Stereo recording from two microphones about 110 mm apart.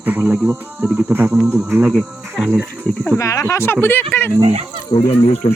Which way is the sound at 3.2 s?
30° left (ahead or behind).